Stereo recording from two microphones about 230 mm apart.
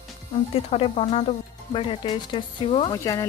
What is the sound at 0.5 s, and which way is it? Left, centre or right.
Speech, left.